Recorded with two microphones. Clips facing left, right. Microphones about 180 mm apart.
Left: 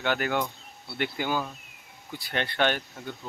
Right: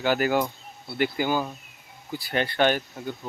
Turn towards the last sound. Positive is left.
turn(degrees=-10)  # may be behind; listen again after turning